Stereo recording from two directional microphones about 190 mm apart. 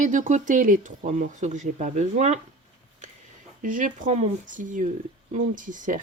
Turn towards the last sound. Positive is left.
turn(degrees=-45)  # may be behind; listen again after turning